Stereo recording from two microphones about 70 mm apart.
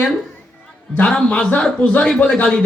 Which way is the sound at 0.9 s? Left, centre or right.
Centre.